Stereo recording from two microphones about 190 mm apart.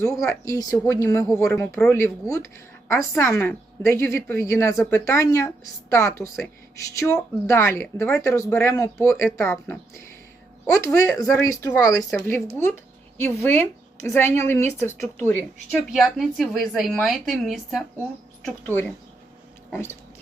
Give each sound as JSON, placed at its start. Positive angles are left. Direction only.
{"t": 0.0, "sound": "a woman's voice", "side_deg": 15}
{"t": 18.4, "sound": "speech", "side_deg": 10}